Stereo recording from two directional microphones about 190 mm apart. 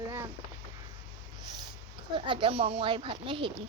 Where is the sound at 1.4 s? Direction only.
25° right (ahead or behind).